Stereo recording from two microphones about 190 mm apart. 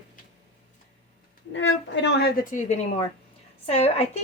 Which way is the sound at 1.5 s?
70° left (ahead or behind).